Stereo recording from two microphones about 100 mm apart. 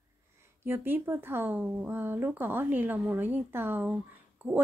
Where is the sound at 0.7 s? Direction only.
20° right (ahead or behind).